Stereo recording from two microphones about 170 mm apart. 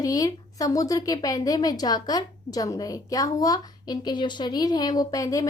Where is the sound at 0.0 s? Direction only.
20° left (ahead or behind).